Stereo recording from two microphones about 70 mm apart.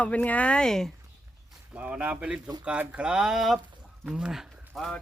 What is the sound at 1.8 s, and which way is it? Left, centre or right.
Speech, centre.